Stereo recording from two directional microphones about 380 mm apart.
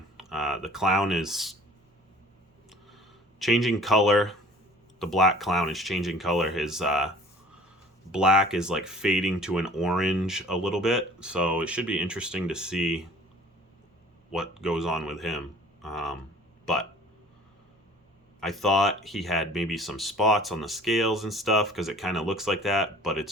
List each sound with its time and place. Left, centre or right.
0.2 s speech: centre
2.6 s a sound: centre
4.9 s speech: centre
8.1 s speech: centre
14.3 s speech: centre
18.3 s speech: centre